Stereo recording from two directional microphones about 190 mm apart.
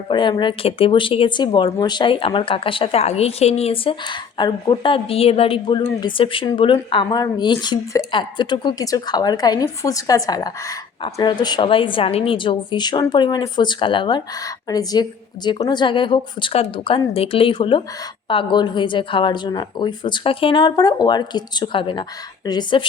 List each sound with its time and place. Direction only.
0.1 s speech: 25° left (ahead or behind)